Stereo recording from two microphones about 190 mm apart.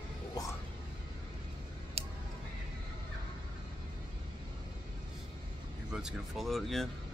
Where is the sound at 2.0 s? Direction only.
30° right (ahead or behind).